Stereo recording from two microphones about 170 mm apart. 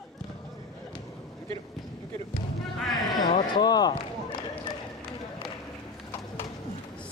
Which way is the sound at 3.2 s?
25° left (ahead or behind).